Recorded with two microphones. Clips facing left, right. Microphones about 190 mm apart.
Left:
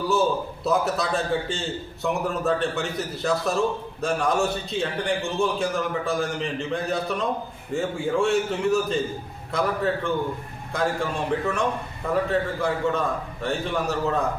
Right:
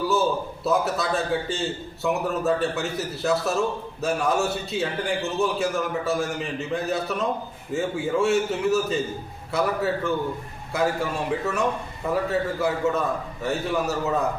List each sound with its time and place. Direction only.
0.1 s a man's voice: centre (ahead or behind)